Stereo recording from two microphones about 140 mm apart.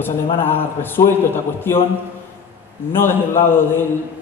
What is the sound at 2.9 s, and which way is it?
Speech, 15° left (ahead or behind).